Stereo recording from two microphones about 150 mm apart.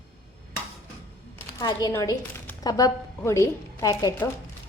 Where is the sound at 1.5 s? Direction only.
25° left (ahead or behind).